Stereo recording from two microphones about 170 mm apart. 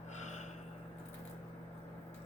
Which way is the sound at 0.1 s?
45° left (ahead or behind).